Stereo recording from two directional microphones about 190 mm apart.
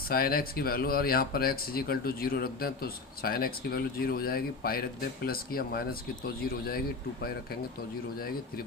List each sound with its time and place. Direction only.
0.1 s speech: 50° left (ahead or behind)